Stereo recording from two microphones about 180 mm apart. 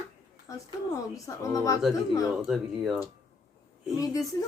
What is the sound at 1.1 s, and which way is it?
Speech, 15° left (ahead or behind).